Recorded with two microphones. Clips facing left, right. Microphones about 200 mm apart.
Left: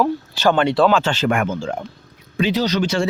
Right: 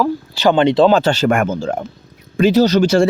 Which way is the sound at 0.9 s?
40° right (ahead or behind).